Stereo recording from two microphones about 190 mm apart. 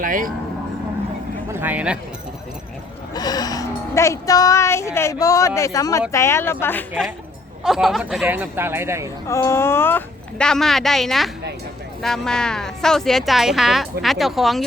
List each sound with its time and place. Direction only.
0.0 s speech: 45° right (ahead or behind)
1.5 s speech: 10° right (ahead or behind)
3.2 s speech: 20° left (ahead or behind)
7.6 s speech: centre (ahead or behind)
9.2 s speech: 15° left (ahead or behind); by 14.6 s centre (ahead or behind)